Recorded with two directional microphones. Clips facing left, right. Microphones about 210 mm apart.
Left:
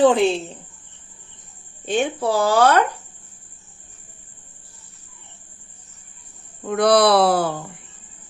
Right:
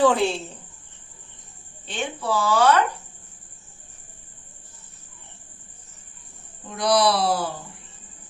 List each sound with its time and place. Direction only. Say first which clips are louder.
0.0 s a woman's voice: left 4 dB; 20° left (ahead or behind)
1.8 s a woman's voice: left 9 dB; 50° left (ahead or behind)
6.7 s speech: left 5 dB; 60° left (ahead or behind)